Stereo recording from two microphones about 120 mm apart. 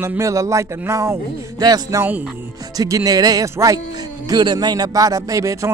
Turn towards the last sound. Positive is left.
turn(degrees=-30)  # may be behind; listen again after turning